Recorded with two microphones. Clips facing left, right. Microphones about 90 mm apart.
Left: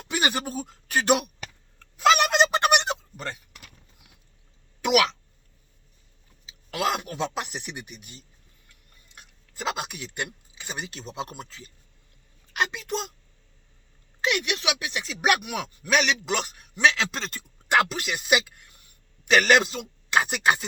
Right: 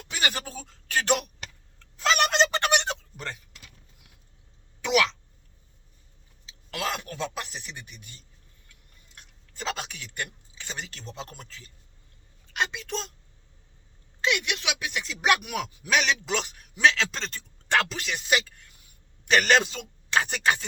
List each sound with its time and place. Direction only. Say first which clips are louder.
0.1 s speech: left 4 dB; 15° left (ahead or behind)
2.0 s fowl: left 3 dB; 15° left (ahead or behind)
3.2 s speech: left 2 dB; 5° left (ahead or behind)
6.4 s a sound: left 5 dB; 10° left (ahead or behind)
9.1 s speech: left 2 dB; 10° left (ahead or behind)
12.5 s a woman's voice: left 2 dB; 5° left (ahead or behind)
14.2 s speech: left 1 dB; 5° left (ahead or behind)